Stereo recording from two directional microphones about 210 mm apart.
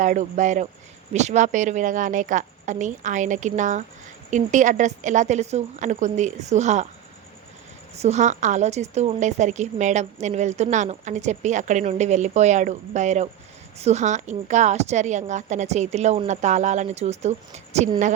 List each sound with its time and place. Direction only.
0.0 s a woman's voice: 35° right (ahead or behind)
7.9 s a woman's voice: 30° right (ahead or behind)